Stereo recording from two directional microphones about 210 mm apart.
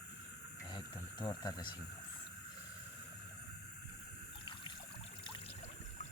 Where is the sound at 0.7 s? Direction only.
20° left (ahead or behind).